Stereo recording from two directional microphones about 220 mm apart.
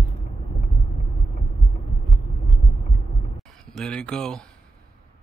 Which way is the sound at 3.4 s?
5° left (ahead or behind).